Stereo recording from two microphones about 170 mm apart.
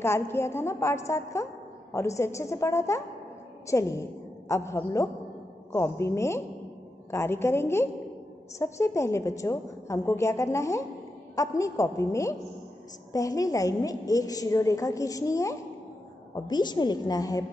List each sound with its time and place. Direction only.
0.0 s a woman's voice: 15° left (ahead or behind)